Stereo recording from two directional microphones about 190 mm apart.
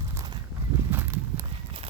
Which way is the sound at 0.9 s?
15° right (ahead or behind).